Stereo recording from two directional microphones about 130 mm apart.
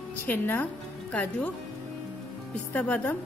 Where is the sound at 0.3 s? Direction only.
15° left (ahead or behind).